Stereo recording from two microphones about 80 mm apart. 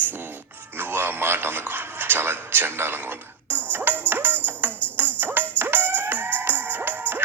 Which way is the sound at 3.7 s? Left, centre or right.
Right.